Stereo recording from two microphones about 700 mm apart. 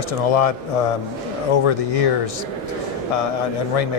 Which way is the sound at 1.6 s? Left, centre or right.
Left.